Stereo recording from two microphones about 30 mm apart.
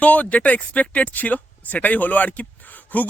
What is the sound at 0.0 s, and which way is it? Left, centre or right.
Speech, left.